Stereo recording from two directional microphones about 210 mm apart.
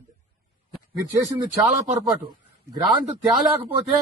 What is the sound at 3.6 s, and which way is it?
Speech, 25° right (ahead or behind).